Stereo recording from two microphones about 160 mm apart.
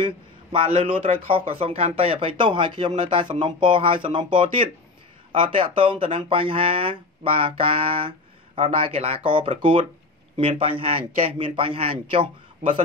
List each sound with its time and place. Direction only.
0.0 s a man's voice: 35° right (ahead or behind)